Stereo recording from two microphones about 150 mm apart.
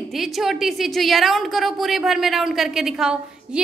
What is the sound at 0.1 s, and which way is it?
A woman's voice, centre (ahead or behind).